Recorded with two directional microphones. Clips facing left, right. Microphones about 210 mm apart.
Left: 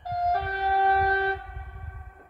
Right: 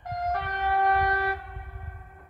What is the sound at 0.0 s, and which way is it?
Vehicle, 30° left (ahead or behind).